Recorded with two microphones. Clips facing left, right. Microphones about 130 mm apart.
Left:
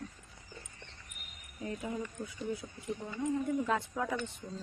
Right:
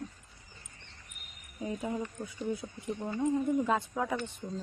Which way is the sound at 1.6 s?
20° right (ahead or behind).